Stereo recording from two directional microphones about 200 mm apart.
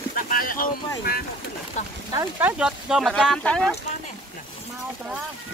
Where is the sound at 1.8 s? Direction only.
35° left (ahead or behind).